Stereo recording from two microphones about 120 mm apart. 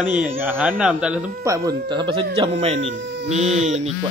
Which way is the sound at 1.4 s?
25° right (ahead or behind).